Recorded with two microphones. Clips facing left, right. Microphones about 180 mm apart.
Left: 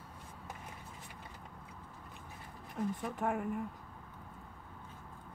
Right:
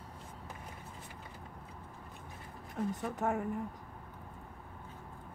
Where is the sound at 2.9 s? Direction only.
45° right (ahead or behind).